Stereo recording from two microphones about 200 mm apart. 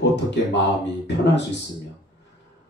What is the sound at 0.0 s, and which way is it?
Speech, 60° left (ahead or behind).